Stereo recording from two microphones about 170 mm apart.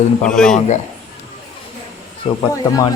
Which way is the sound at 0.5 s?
45° left (ahead or behind).